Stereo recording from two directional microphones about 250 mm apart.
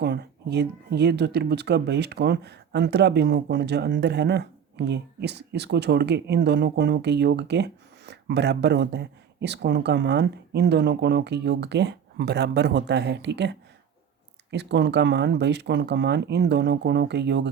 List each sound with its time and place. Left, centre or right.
0.0 s speech: right